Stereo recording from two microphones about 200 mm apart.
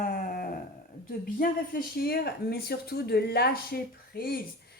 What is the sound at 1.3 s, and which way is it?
Speech, 45° left (ahead or behind).